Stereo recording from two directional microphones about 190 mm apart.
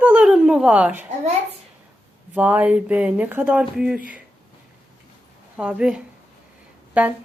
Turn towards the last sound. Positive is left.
turn(degrees=-5)  # may be behind; listen again after turning